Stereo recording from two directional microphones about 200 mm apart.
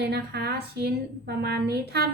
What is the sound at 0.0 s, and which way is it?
A woman's voice, 55° right (ahead or behind).